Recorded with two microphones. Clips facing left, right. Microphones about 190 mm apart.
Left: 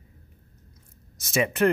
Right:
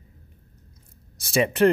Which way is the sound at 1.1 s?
30° right (ahead or behind).